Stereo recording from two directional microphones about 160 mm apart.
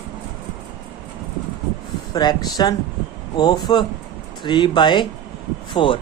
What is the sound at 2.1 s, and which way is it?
Speech, 25° left (ahead or behind).